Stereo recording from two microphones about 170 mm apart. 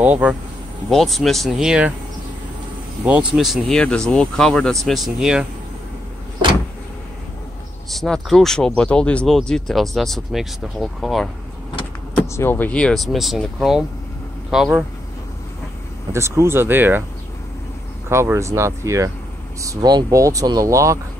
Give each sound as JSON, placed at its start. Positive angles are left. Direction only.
{"t": 0.0, "sound": "speech", "side_deg": -10}
{"t": 3.1, "sound": "speech", "side_deg": -5}
{"t": 7.9, "sound": "speech", "side_deg": 0}
{"t": 12.2, "sound": "speech", "side_deg": 15}
{"t": 16.1, "sound": "speech", "side_deg": -15}
{"t": 18.1, "sound": "speech", "side_deg": -15}